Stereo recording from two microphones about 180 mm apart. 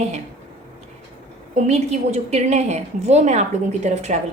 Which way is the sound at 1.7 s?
40° right (ahead or behind).